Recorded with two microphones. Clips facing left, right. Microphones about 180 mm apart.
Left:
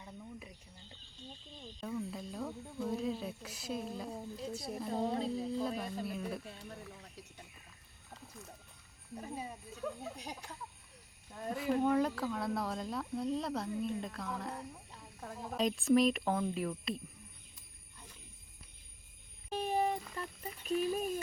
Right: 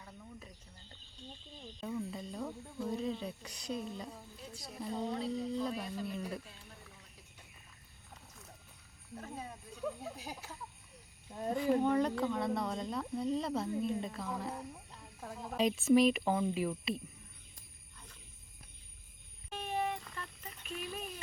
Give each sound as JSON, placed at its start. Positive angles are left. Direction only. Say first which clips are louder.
{"t": 0.0, "sound": "a sound", "louder": "left 3 dB", "side_deg": 10}
{"t": 1.8, "sound": "speech", "louder": "even", "side_deg": 0}
{"t": 4.1, "sound": "a woman's voice", "louder": "left 9 dB", "side_deg": 30}
{"t": 5.3, "sound": "speech", "louder": "even", "side_deg": 5}
{"t": 9.1, "sound": "speech", "louder": "left 2 dB", "side_deg": 10}
{"t": 9.8, "sound": "speech", "louder": "right 1 dB", "side_deg": 0}
{"t": 11.3, "sound": "speech", "louder": "right 3 dB", "side_deg": -20}
{"t": 11.5, "sound": "speech", "louder": "right 1 dB", "side_deg": 5}
{"t": 19.5, "sound": "a sound", "louder": "left 4 dB", "side_deg": 40}
{"t": 20.7, "sound": "speech", "louder": "left 10 dB", "side_deg": 40}